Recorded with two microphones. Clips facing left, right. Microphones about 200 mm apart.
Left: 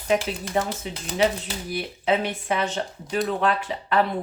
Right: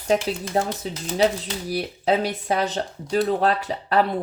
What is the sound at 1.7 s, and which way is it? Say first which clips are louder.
Speech: right 2 dB; 40° right (ahead or behind).